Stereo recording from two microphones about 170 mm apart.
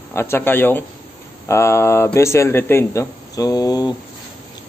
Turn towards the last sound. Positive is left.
turn(degrees=20)  # may be behind; listen again after turning